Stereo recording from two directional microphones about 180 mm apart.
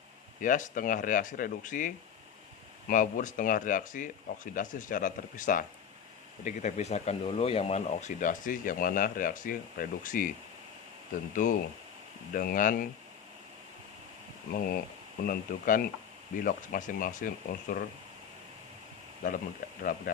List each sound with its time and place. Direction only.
0.4 s speech: 45° left (ahead or behind)
2.9 s speech: 45° left (ahead or behind)
14.5 s speech: 55° left (ahead or behind)